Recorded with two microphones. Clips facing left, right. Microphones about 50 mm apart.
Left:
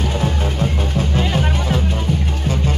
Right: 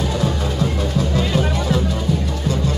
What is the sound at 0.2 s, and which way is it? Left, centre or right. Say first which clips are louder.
Music: even; left.